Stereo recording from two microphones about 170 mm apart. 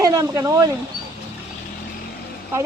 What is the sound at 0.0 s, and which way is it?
Speech, 20° right (ahead or behind).